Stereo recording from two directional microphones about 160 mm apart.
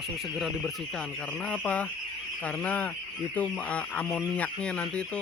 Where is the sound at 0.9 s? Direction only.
5° left (ahead or behind).